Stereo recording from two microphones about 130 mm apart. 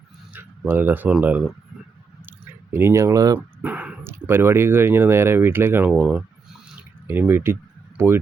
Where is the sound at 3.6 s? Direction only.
10° right (ahead or behind).